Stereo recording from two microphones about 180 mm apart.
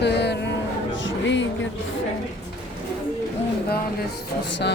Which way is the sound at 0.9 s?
90° left.